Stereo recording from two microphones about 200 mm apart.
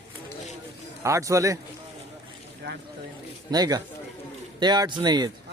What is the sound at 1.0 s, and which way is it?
Speech, 15° right (ahead or behind).